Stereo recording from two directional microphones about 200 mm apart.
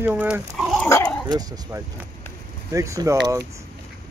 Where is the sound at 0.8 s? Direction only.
15° left (ahead or behind).